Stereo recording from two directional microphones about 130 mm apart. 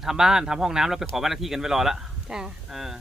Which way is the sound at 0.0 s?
5° right (ahead or behind).